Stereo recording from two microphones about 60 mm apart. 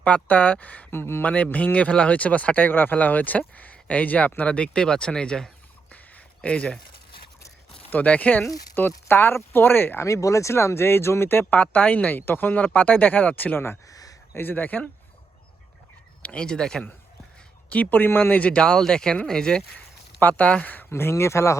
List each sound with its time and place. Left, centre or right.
0.0 s speech: left
0.9 s speech: left
1.2 s speech: left
5.9 s a sound: left
7.9 s speech: left
9.0 s speech: left
10.0 s speech: left
13.8 s a sound: left
14.3 s speech: left
16.2 s speech: centre
17.7 s a man's voice: left
20.1 s speech: left
20.9 s speech: left